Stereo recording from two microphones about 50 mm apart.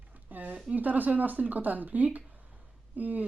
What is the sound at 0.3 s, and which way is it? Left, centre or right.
Speech, right.